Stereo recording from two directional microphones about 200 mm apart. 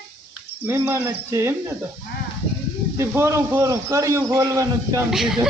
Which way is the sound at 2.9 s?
15° right (ahead or behind).